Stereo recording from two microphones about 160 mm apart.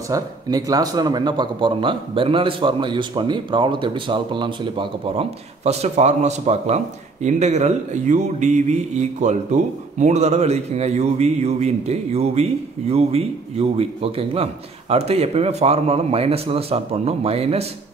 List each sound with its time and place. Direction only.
0.1 s speech: 20° right (ahead or behind)
5.6 s a man's voice: 45° right (ahead or behind)